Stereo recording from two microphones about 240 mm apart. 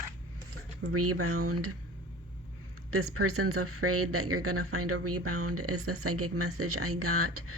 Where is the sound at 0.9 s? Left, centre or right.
Right.